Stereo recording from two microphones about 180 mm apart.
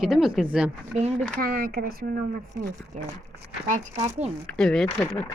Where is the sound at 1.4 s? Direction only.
55° right (ahead or behind).